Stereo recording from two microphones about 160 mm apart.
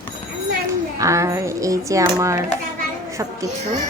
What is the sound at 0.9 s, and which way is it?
A woman's voice, 20° right (ahead or behind).